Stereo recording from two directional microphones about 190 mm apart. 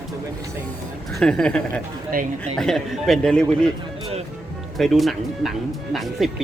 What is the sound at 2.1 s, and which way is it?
Speech, 50° right (ahead or behind).